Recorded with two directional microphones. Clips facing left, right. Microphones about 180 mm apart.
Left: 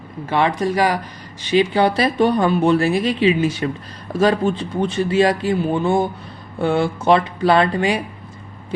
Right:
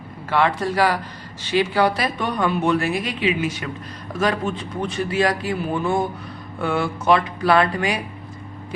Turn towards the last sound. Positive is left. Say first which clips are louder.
# left 2 dB
turn(degrees=25)  # may be behind; listen again after turning